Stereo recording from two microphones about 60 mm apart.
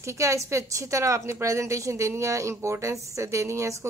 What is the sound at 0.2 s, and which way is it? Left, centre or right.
A woman's voice, right.